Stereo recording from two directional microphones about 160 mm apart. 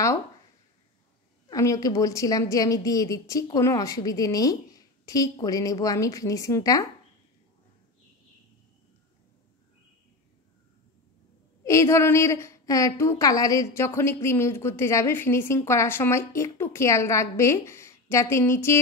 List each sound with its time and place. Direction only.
1.5 s a woman's voice: 20° left (ahead or behind)
11.6 s a woman's voice: 20° left (ahead or behind)